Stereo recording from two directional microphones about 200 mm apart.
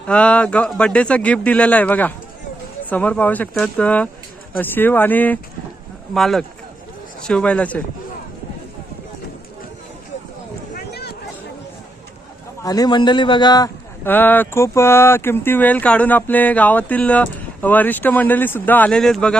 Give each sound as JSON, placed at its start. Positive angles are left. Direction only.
{"t": 0.1, "sound": "a man's voice", "side_deg": 5}
{"t": 10.8, "sound": "a sound", "side_deg": 50}
{"t": 12.6, "sound": "speech", "side_deg": 20}